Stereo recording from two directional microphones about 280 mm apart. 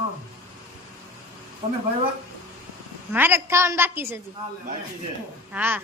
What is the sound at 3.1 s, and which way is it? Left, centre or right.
A woman's voice, centre.